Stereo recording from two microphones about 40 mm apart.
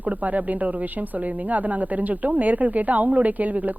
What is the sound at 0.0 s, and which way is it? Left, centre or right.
Speech, right.